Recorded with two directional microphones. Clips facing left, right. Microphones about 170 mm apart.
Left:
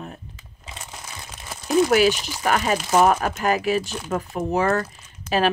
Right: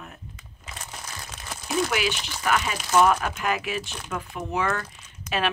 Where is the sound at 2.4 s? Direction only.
40° left (ahead or behind).